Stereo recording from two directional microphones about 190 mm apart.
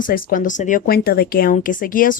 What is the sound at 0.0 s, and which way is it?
Speech, 45° left (ahead or behind).